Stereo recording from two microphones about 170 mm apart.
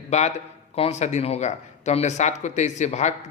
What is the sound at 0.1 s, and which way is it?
Speech, 40° left (ahead or behind).